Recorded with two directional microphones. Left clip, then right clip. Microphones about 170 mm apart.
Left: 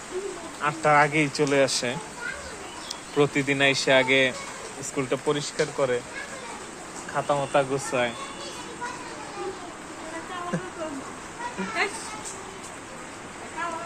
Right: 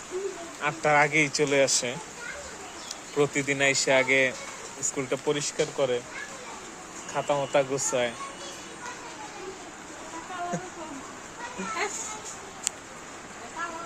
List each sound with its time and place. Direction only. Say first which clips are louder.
0.6 s speech: left 2 dB; 20° right (ahead or behind)
7.1 s speech: left 2 dB; 25° right (ahead or behind)